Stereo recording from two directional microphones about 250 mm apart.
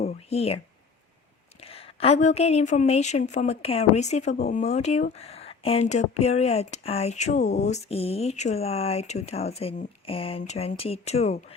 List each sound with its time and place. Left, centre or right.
0.0 s speech: left
1.6 s a woman's voice: left